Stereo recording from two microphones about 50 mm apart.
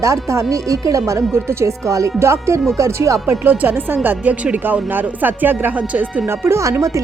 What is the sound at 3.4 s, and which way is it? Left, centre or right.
Speech, right.